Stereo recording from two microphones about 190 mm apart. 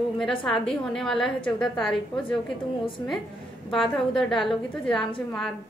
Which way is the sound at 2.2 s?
25° left (ahead or behind).